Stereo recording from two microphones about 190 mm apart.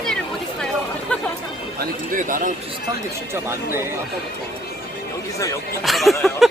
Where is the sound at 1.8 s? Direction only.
45° right (ahead or behind).